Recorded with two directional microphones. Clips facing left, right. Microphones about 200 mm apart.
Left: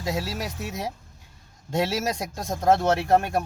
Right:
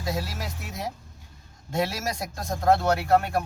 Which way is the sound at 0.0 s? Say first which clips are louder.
Left 2 dB; 20° left (ahead or behind).